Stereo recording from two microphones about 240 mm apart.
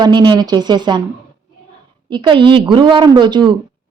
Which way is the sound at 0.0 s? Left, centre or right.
Centre.